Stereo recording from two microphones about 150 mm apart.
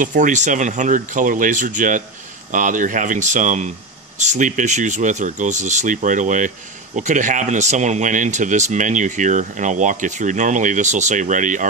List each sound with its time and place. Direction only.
0.0 s a man's voice: 55° right (ahead or behind)